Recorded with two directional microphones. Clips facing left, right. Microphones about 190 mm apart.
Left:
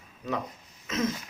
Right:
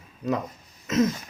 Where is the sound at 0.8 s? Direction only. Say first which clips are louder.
Right 7 dB; 40° right (ahead or behind).